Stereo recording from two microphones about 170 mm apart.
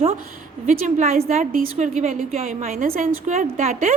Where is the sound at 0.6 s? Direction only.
45° right (ahead or behind).